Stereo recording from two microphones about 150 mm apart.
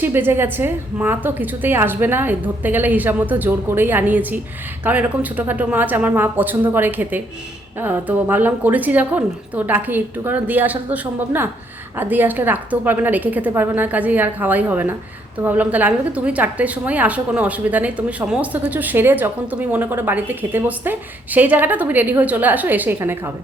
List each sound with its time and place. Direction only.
0.0 s a woman's voice: 15° right (ahead or behind)